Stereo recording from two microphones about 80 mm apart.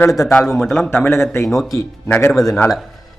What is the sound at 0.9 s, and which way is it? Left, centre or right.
Speech, left.